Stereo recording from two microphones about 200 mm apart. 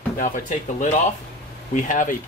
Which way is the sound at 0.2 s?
40° left (ahead or behind).